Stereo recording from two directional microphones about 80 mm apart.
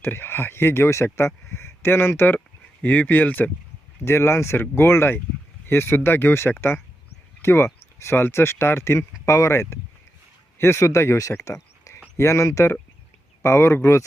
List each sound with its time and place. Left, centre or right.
0.0 s speech: left
4.0 s speech: left